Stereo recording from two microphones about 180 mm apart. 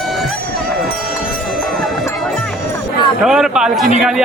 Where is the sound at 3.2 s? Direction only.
5° right (ahead or behind).